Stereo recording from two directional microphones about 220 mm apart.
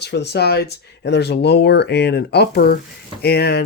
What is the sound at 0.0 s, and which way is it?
Speech, 50° left (ahead or behind).